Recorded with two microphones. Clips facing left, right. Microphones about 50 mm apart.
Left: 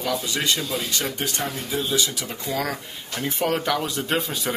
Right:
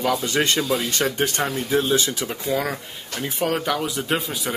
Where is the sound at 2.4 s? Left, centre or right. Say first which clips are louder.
Right 2 dB; centre.